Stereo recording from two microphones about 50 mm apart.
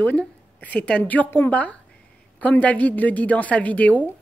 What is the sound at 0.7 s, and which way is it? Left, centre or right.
Speech, left.